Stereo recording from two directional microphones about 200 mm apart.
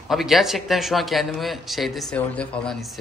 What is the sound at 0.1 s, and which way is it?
Speech, centre (ahead or behind).